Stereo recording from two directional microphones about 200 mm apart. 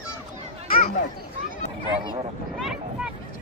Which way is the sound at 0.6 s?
45° left (ahead or behind).